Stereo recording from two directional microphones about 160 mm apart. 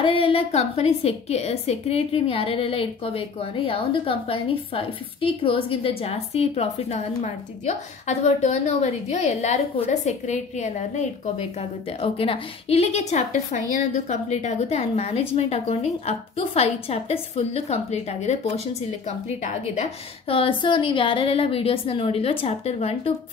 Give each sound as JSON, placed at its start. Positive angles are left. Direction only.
{"t": 0.0, "sound": "a woman's voice", "side_deg": 35}
{"t": 12.0, "sound": "a woman's voice", "side_deg": 35}